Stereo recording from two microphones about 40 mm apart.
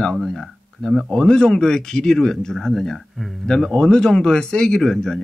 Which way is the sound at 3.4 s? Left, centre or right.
Centre.